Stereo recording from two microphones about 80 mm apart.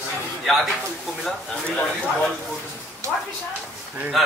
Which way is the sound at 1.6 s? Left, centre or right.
Centre.